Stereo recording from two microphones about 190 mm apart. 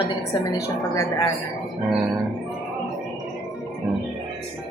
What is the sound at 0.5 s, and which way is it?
Speech, 20° left (ahead or behind).